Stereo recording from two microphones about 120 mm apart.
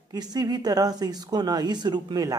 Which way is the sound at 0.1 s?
35° right (ahead or behind).